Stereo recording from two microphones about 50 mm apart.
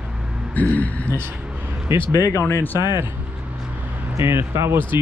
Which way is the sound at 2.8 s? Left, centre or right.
Right.